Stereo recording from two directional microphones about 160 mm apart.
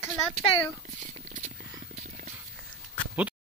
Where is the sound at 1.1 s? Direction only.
45° right (ahead or behind).